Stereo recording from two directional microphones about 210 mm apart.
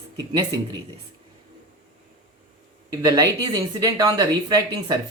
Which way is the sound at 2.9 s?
20° right (ahead or behind).